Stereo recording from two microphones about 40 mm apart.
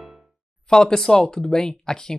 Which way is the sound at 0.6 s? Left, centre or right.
Centre.